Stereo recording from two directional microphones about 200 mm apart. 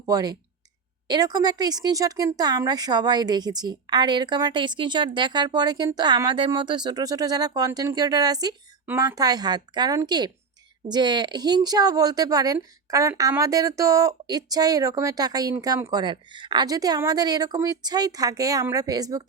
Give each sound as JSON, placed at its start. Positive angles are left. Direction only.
{"t": 0.0, "sound": "speech", "side_deg": -20}